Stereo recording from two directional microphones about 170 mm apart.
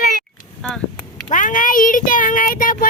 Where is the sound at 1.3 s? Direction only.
50° left (ahead or behind).